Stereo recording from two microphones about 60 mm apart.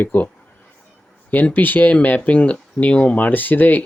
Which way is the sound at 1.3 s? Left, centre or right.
Left.